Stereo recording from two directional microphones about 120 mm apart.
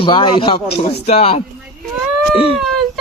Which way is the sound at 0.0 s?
45° left (ahead or behind).